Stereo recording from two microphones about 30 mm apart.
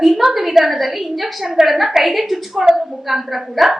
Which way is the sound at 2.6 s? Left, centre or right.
Centre.